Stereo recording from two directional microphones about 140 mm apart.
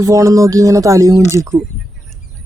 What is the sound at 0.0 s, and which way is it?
Speech, 25° right (ahead or behind).